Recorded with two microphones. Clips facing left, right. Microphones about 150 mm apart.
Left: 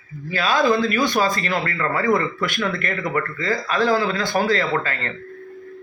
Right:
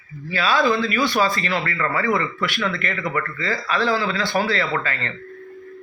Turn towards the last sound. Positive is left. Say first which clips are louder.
# left 1 dB
turn(degrees=40)  # may be behind; listen again after turning